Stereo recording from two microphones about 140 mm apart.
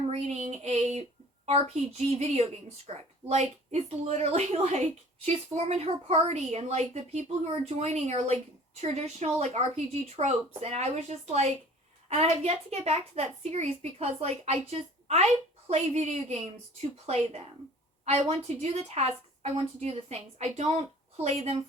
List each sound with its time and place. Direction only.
0.1 s a sound: 50° right (ahead or behind)
1.5 s a woman's voice: 50° right (ahead or behind)
18.0 s a woman's voice: 50° right (ahead or behind)